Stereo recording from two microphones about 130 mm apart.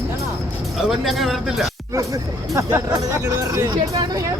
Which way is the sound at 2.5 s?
20° right (ahead or behind).